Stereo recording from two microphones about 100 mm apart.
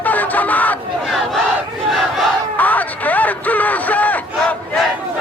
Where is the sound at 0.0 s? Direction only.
15° left (ahead or behind).